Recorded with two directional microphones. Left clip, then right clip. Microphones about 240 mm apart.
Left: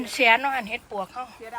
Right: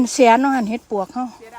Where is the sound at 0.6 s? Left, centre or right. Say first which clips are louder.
Right 7 dB; right.